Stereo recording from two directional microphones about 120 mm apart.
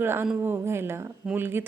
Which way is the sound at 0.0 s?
20° right (ahead or behind).